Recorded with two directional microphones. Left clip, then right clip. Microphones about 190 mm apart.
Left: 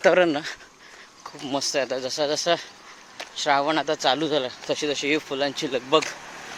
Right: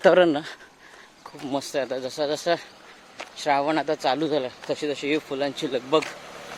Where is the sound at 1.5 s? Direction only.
Centre (ahead or behind).